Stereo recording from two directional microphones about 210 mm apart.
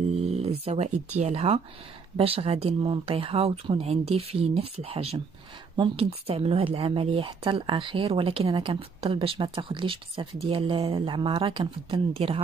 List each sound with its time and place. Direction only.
0.2 s speech: 30° right (ahead or behind)